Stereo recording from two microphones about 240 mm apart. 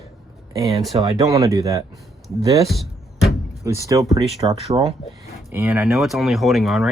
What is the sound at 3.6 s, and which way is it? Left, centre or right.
Speech, centre.